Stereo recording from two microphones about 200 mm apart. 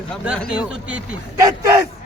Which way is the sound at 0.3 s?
5° right (ahead or behind).